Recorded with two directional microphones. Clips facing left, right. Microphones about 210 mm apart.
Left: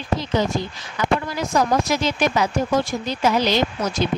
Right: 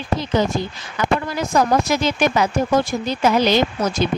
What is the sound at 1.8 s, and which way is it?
A woman's voice, 55° right (ahead or behind).